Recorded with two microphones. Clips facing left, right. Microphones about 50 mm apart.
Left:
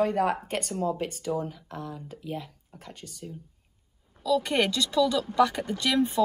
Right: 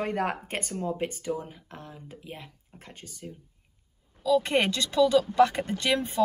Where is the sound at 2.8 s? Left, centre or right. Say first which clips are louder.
Left 1 dB; right.